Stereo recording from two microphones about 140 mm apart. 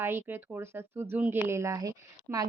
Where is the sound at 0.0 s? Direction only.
15° right (ahead or behind).